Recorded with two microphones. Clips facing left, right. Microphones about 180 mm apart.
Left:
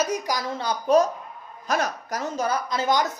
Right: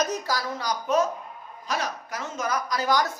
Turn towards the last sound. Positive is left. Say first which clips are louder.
# left 1 dB
turn(degrees=20)  # may be behind; listen again after turning